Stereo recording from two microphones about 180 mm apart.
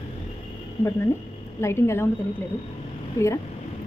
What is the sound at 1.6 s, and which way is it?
Speech, 15° left (ahead or behind).